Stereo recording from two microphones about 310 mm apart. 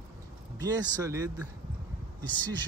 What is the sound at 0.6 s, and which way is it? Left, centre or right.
Speech, centre.